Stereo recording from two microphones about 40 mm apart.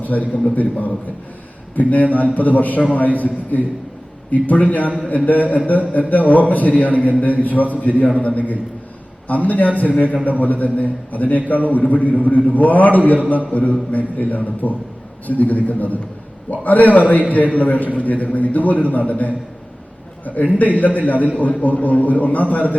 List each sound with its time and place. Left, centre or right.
0.0 s a man's voice: left
9.2 s a man's voice: left